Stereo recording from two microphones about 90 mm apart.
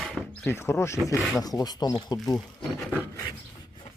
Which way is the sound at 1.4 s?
45° left (ahead or behind).